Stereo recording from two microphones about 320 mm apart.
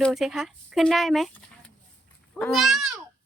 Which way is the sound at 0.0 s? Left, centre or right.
Centre.